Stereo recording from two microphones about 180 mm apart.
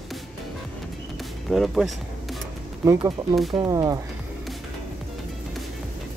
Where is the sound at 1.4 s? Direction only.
Centre (ahead or behind).